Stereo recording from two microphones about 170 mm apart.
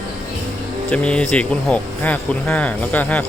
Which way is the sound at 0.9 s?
5° left (ahead or behind).